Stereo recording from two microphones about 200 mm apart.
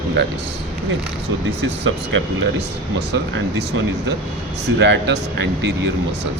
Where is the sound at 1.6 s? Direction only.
70° right (ahead or behind).